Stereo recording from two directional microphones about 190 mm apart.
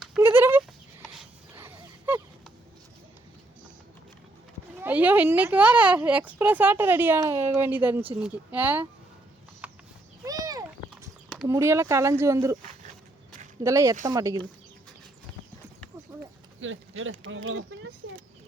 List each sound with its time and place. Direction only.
0.2 s goat: 10° right (ahead or behind)
1.5 s a sound: 10° right (ahead or behind)
4.8 s speech: 10° right (ahead or behind)
10.2 s clip-clop: 20° right (ahead or behind)
11.4 s speech: 15° right (ahead or behind)
13.7 s speech: 15° right (ahead or behind)
16.6 s speech: 90° right